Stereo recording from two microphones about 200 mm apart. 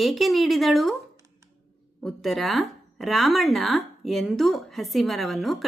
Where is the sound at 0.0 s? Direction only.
Centre (ahead or behind).